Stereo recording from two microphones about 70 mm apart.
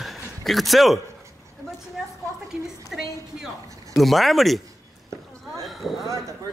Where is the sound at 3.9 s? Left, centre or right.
Centre.